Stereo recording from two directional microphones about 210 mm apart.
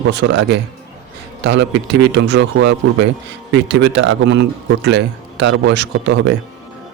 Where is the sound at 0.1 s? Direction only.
55° right (ahead or behind).